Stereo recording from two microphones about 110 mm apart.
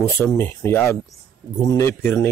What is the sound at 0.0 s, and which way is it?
Speech, 25° left (ahead or behind).